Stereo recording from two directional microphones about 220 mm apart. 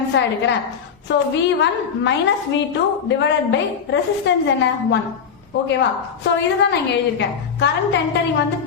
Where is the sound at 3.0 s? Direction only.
55° left (ahead or behind).